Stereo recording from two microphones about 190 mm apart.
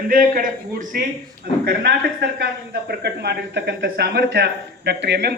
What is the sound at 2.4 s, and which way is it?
Speech, 60° right (ahead or behind).